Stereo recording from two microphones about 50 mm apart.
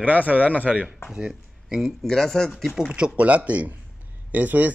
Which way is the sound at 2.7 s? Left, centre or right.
Centre.